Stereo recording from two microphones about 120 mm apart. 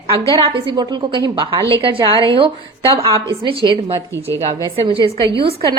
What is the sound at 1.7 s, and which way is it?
A woman's voice, 45° right (ahead or behind).